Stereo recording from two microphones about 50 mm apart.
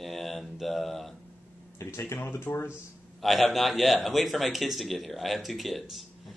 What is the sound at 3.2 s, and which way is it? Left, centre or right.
A man's voice, centre.